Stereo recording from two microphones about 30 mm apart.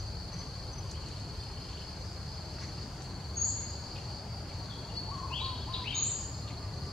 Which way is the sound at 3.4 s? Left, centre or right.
Centre.